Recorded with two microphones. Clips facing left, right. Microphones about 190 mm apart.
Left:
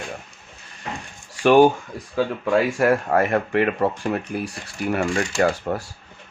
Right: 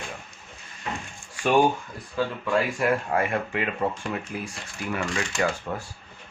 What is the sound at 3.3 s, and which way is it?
Speech, 60° left (ahead or behind).